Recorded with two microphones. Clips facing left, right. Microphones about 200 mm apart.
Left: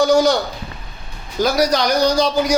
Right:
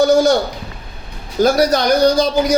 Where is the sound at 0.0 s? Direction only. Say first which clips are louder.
Right 2 dB; 55° right (ahead or behind).